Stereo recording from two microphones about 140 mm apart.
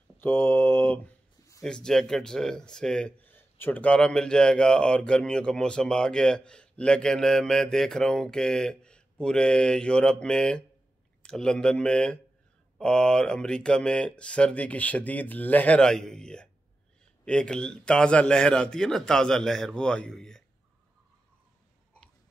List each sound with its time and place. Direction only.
0.2 s speech: 15° left (ahead or behind)